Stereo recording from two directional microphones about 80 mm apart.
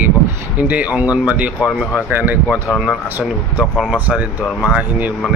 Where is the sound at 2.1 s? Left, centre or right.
Right.